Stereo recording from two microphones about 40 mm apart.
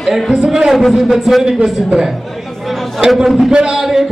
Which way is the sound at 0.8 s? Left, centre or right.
Centre.